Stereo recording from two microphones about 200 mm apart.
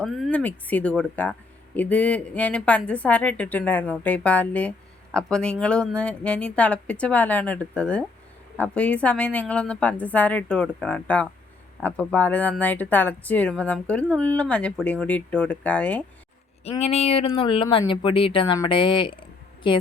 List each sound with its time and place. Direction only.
0.0 s speech: centre (ahead or behind)
16.6 s speech: 30° left (ahead or behind)